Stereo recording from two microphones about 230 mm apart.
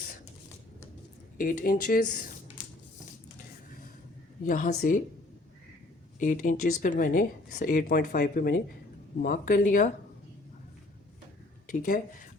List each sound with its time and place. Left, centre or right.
1.4 s speech: left
4.4 s speech: left
6.1 s speech: left
11.6 s speech: left